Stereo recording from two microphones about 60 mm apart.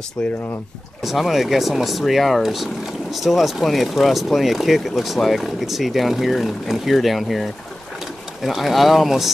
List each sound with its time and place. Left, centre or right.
0.2 s speech: centre
1.0 s speech: centre
8.5 s speech: centre